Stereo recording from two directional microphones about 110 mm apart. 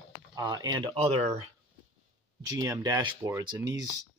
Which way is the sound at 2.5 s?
35° right (ahead or behind).